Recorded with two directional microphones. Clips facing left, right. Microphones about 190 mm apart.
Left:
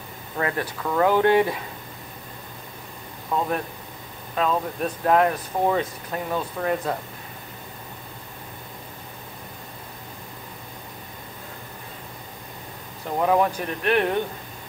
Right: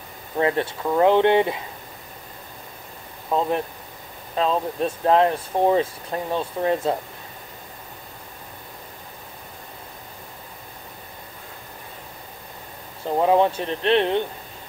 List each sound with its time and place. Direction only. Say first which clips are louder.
0.4 s speech: right 5 dB; 25° right (ahead or behind)
3.3 s speech: right 3 dB; 20° right (ahead or behind)
13.2 s speech: right 2 dB; 25° right (ahead or behind)